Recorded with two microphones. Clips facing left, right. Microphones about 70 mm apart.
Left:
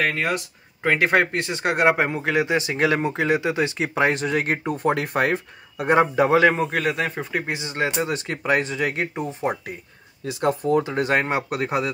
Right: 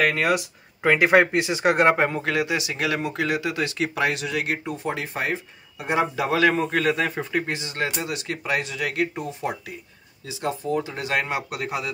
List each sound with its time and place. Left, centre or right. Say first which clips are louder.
0.2 s speech: right 2 dB; centre; by 5.9 s left
5.9 s speech: left 4 dB; left
6.6 s speech: even; centre
7.5 s speech: left 3 dB; left
10.2 s speech: left 5 dB; left